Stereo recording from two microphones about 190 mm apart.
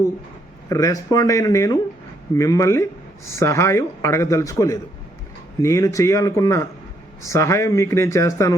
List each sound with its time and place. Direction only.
0.7 s speech: 20° left (ahead or behind)